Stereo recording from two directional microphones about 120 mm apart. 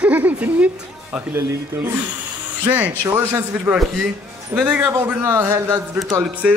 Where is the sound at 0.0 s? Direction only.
15° right (ahead or behind).